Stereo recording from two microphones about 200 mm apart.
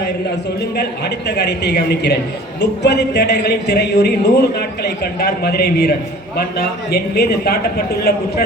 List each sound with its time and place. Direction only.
1.4 s a man's voice: 55° left (ahead or behind)